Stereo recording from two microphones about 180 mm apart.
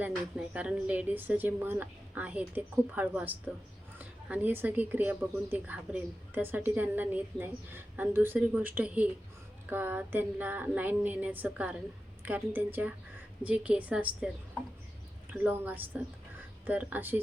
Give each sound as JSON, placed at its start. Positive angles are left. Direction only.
{"t": 0.0, "sound": "a woman's voice", "side_deg": -5}
{"t": 15.3, "sound": "a woman's voice", "side_deg": -10}